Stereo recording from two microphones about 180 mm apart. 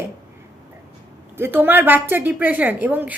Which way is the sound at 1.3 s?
10° right (ahead or behind).